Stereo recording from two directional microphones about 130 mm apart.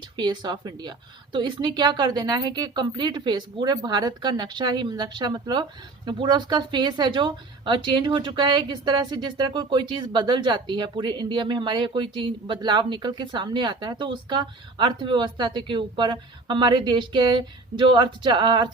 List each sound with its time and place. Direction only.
0.2 s speech: 35° right (ahead or behind)